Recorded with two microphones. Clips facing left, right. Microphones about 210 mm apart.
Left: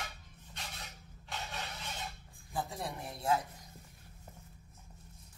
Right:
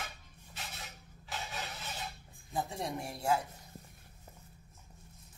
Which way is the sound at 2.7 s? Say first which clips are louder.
Right 3 dB; 30° right (ahead or behind).